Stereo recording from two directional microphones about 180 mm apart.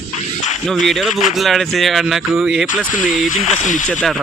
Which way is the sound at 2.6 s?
45° left (ahead or behind).